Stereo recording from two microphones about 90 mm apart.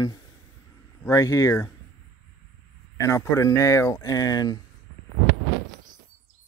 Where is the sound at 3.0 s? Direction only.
35° left (ahead or behind).